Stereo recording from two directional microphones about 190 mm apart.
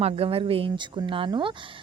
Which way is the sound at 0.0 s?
30° right (ahead or behind).